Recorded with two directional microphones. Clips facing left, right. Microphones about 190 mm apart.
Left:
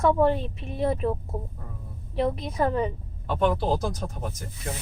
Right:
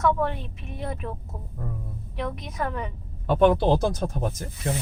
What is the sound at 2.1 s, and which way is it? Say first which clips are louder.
Speech: left 6 dB; 30° left (ahead or behind).